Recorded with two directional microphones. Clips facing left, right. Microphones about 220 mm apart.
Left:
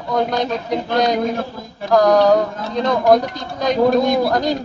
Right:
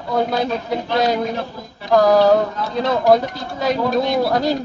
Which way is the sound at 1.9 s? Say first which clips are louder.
Even; 5° right (ahead or behind).